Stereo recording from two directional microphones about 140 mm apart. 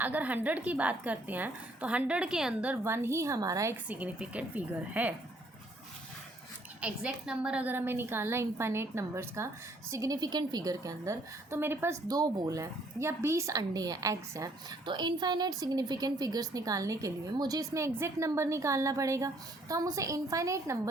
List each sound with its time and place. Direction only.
0.0 s a woman's voice: 10° right (ahead or behind)
3.8 s a woman's voice: 10° right (ahead or behind)
6.8 s a woman's voice: 5° right (ahead or behind)
12.0 s speech: 30° right (ahead or behind)